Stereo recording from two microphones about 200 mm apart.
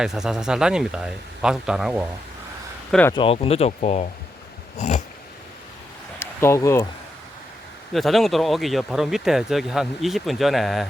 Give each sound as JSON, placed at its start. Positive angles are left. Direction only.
{"t": 0.0, "sound": "speech", "side_deg": 0}
{"t": 2.9, "sound": "speech", "side_deg": 10}
{"t": 3.2, "sound": "speech", "side_deg": 30}
{"t": 6.1, "sound": "speech", "side_deg": 15}
{"t": 7.9, "sound": "speech", "side_deg": 0}